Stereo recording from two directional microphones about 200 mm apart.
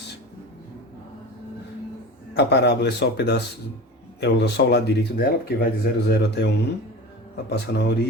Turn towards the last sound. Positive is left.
turn(degrees=55)  # may be behind; listen again after turning